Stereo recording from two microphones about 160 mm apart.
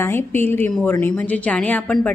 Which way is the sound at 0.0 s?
15° left (ahead or behind).